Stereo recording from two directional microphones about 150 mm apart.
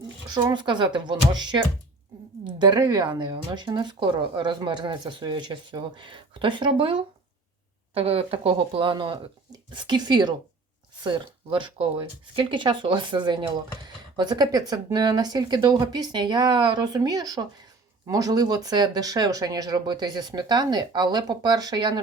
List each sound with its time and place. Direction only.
0.3 s speech: 25° right (ahead or behind)
7.9 s speech: 40° right (ahead or behind)